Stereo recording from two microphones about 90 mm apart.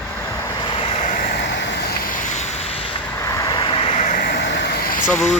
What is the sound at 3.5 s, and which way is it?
Vehicle, 70° left (ahead or behind).